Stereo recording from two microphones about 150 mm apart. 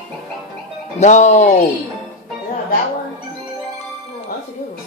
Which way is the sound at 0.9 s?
50° left (ahead or behind).